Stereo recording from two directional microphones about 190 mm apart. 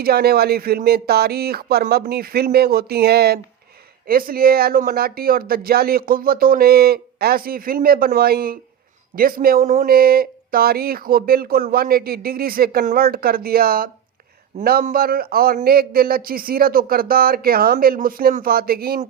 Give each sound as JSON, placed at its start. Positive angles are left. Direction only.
{"t": 0.0, "sound": "speech", "side_deg": -55}